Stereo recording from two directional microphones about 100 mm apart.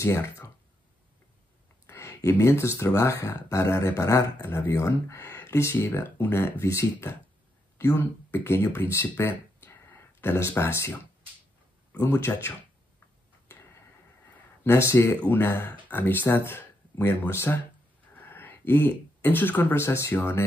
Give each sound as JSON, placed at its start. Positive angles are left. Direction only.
{"t": 0.0, "sound": "speech", "side_deg": 30}
{"t": 1.9, "sound": "a sound", "side_deg": 25}
{"t": 2.8, "sound": "speech", "side_deg": 30}
{"t": 7.7, "sound": "a sound", "side_deg": 30}
{"t": 8.0, "sound": "speech", "side_deg": 20}
{"t": 12.0, "sound": "speech", "side_deg": 25}
{"t": 14.6, "sound": "speech", "side_deg": 25}